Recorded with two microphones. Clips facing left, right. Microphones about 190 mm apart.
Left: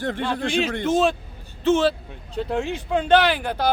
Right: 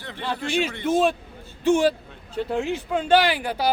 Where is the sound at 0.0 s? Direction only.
50° left (ahead or behind).